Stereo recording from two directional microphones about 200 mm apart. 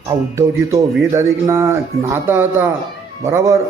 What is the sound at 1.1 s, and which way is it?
A man's voice, 15° right (ahead or behind).